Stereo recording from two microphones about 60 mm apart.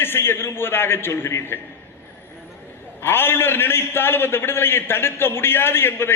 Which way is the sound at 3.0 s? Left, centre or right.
Left.